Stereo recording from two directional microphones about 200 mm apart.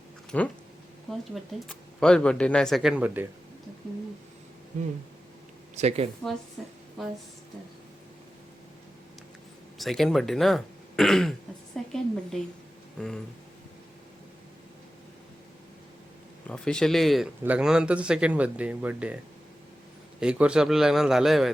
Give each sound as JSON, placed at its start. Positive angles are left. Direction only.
{"t": 0.3, "sound": "speech", "side_deg": 5}
{"t": 5.7, "sound": "speech", "side_deg": -35}
{"t": 6.6, "sound": "speech", "side_deg": 0}
{"t": 9.7, "sound": "speech", "side_deg": 0}
{"t": 16.5, "sound": "speech", "side_deg": 5}
{"t": 20.1, "sound": "speech", "side_deg": -5}